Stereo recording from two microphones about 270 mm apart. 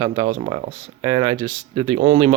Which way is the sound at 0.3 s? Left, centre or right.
Right.